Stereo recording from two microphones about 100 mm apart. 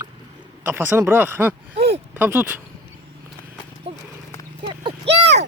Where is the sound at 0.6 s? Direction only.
20° right (ahead or behind).